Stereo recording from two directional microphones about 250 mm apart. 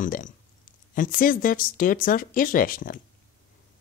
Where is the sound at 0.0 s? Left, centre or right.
Left.